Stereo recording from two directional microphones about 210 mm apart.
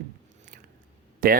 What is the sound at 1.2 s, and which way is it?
Speech, 40° right (ahead or behind).